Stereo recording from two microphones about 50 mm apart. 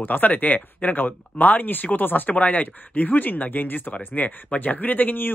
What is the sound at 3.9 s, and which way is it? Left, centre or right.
Speech, left.